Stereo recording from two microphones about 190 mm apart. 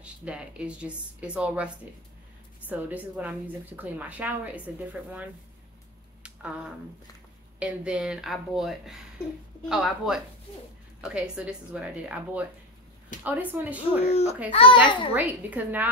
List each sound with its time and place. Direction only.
0.0 s a woman's voice: 5° right (ahead or behind)
6.2 s a sound: 5° right (ahead or behind)
7.5 s a woman's voice: 5° right (ahead or behind)
14.0 s a child's voice: 35° left (ahead or behind)
15.1 s a woman's voice: 10° right (ahead or behind)